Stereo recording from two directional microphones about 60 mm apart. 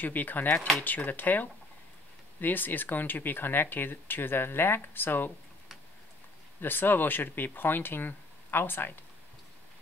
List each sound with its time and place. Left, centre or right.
0.0 s speech: left
0.6 s speech: centre
0.8 s speech: left
6.6 s speech: left